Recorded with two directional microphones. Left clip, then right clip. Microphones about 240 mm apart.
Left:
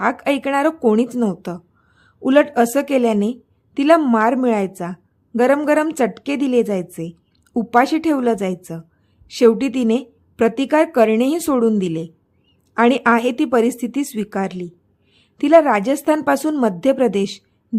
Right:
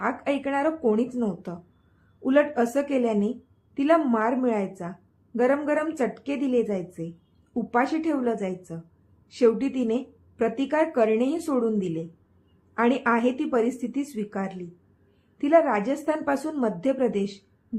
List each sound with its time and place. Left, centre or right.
0.0 s a woman's voice: left